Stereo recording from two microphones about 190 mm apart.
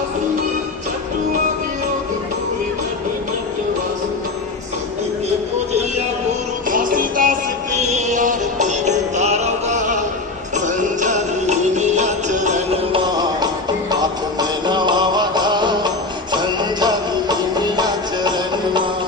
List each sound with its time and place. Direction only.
6.7 s music: 45° right (ahead or behind); by 18.8 s 25° right (ahead or behind)